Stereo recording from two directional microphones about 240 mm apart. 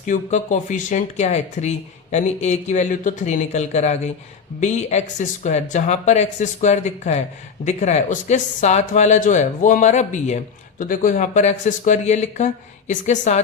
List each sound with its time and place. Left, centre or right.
0.0 s speech: left